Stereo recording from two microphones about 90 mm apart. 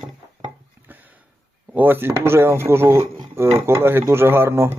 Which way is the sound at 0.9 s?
20° right (ahead or behind).